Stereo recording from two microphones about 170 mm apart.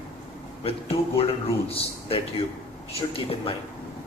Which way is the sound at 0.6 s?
35° left (ahead or behind).